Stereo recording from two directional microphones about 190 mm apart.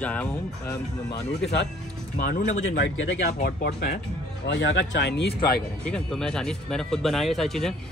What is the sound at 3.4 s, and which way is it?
Speech, 55° left (ahead or behind).